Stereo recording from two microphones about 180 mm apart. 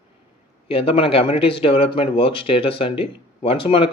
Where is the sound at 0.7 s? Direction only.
30° left (ahead or behind).